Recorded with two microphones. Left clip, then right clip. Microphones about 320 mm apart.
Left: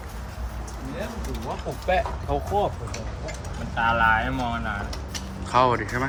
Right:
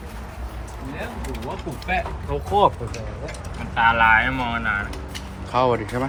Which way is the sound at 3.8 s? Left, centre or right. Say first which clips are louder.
Right 5 dB; centre.